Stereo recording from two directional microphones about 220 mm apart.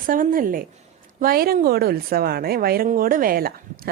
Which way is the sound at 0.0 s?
40° right (ahead or behind).